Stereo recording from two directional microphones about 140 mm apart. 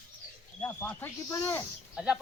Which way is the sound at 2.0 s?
5° right (ahead or behind).